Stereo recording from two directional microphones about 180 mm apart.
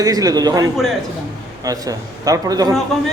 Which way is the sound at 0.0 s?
20° right (ahead or behind).